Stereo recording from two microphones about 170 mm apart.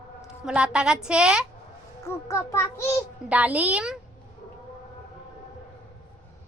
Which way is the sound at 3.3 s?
10° right (ahead or behind).